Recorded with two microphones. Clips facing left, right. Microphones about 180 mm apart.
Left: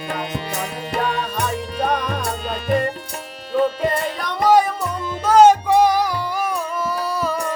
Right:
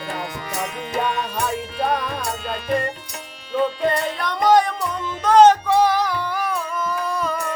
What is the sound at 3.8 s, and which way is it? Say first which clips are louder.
Music: even; 5° left (ahead or behind).